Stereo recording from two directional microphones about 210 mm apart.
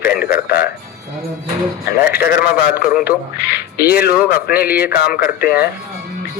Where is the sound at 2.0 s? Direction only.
45° left (ahead or behind).